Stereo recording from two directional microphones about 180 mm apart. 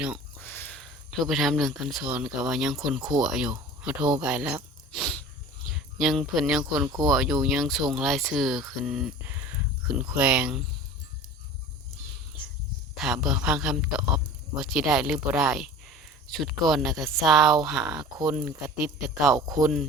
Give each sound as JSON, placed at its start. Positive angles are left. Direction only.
{"t": 0.4, "sound": "speech", "side_deg": 10}
{"t": 6.8, "sound": "speech", "side_deg": -20}
{"t": 7.1, "sound": "speech", "side_deg": 0}
{"t": 13.0, "sound": "speech", "side_deg": 0}
{"t": 19.3, "sound": "speech", "side_deg": -20}